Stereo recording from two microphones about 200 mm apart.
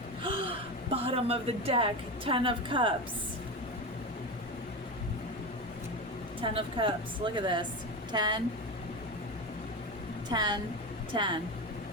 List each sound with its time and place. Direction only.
0.2 s speech: 25° right (ahead or behind)
6.4 s speech: 25° right (ahead or behind)
10.3 s speech: 20° right (ahead or behind)